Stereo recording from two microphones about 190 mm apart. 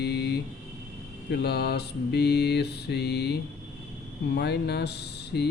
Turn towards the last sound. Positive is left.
turn(degrees=60)  # may be behind; listen again after turning